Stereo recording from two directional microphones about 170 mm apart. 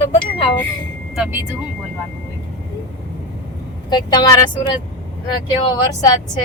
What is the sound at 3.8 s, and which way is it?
Speech, 25° left (ahead or behind).